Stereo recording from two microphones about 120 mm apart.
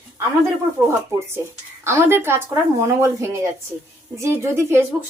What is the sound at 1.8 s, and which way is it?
A woman's voice, 20° right (ahead or behind).